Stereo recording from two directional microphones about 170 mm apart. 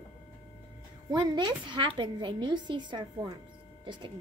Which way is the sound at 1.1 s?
25° right (ahead or behind).